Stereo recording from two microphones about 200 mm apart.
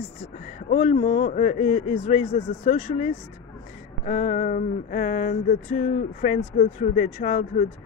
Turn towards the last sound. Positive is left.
turn(degrees=35)  # may be behind; listen again after turning